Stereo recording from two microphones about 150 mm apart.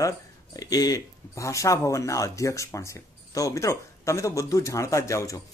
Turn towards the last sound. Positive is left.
turn(degrees=20)  # may be behind; listen again after turning